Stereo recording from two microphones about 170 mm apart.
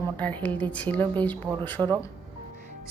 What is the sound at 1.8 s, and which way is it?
Speech, 20° right (ahead or behind).